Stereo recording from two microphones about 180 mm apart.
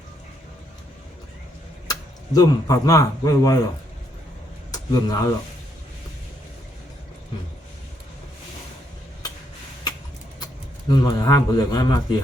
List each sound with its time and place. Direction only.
1.9 s speech: 20° left (ahead or behind)
4.7 s speech: 20° left (ahead or behind)
10.4 s a man's voice: 25° left (ahead or behind)